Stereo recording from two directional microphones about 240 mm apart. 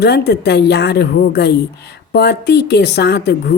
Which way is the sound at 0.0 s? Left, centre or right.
Left.